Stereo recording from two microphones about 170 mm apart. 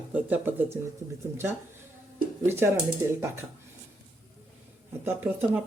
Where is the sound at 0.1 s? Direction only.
10° right (ahead or behind).